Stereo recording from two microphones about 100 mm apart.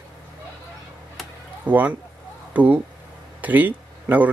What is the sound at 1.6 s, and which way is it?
Speech, 15° right (ahead or behind).